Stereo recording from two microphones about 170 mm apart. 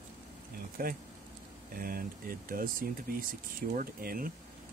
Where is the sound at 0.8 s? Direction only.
60° right (ahead or behind).